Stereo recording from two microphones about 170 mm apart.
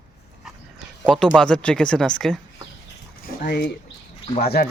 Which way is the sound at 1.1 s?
5° left (ahead or behind).